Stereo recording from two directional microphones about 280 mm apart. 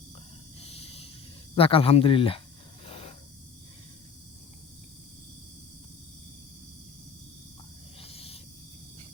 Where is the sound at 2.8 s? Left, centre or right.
Centre.